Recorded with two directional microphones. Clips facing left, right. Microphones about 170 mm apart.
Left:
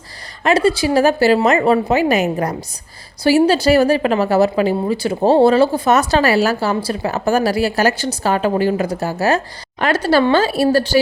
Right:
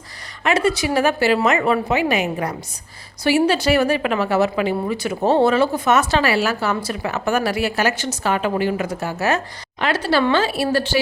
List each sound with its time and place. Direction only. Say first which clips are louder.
0.4 s a woman's voice: left 4 dB; 35° left (ahead or behind)